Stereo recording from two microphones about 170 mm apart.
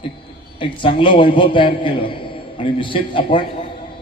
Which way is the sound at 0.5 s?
30° left (ahead or behind).